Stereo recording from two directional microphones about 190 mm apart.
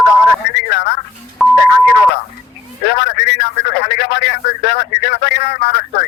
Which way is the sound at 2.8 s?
60° left (ahead or behind).